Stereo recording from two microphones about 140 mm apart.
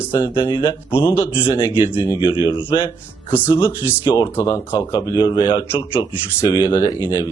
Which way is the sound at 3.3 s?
15° left (ahead or behind).